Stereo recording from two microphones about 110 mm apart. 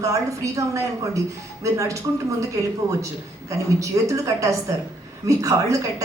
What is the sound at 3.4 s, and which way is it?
A woman's voice, 30° right (ahead or behind).